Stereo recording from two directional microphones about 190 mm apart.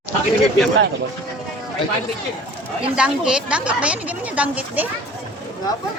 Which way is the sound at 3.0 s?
5° right (ahead or behind).